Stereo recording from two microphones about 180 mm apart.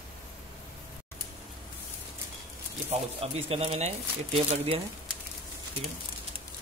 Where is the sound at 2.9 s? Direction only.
35° right (ahead or behind).